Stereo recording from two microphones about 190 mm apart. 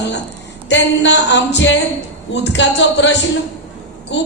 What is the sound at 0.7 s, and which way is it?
A woman's voice, 65° left (ahead or behind).